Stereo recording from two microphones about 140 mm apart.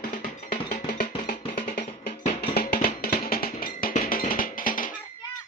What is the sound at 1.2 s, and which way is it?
Music, 85° left.